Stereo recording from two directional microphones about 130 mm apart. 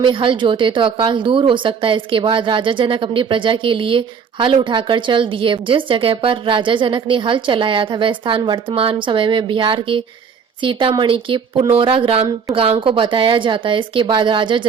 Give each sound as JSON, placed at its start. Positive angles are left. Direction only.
{"t": 0.0, "sound": "a woman's voice", "side_deg": -40}